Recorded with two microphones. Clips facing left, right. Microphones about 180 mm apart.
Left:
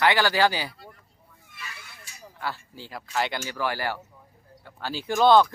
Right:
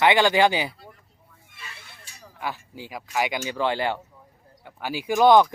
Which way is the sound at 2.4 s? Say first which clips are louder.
Right 2 dB; 15° right (ahead or behind).